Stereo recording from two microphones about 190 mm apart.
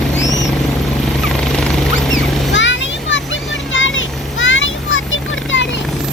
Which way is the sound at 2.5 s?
75° left (ahead or behind).